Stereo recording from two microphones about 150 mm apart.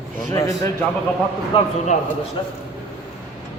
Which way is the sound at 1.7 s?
50° left (ahead or behind).